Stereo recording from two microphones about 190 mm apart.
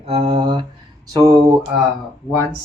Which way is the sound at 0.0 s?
30° right (ahead or behind).